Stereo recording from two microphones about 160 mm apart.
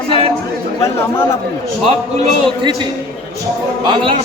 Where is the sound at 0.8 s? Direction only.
15° left (ahead or behind).